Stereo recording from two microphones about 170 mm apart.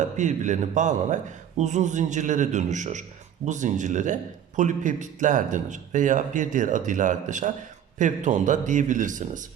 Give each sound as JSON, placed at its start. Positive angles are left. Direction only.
{"t": 0.2, "sound": "speech", "side_deg": -45}